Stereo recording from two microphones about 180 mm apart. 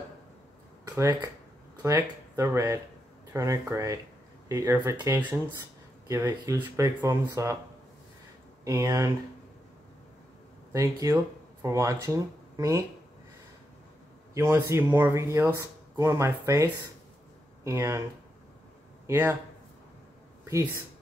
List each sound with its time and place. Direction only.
0.8 s speech: 15° right (ahead or behind)
8.6 s speech: 15° right (ahead or behind)
10.7 s speech: 20° right (ahead or behind)
14.3 s speech: 15° right (ahead or behind)
19.0 s speech: 15° right (ahead or behind)
20.4 s speech: 20° right (ahead or behind)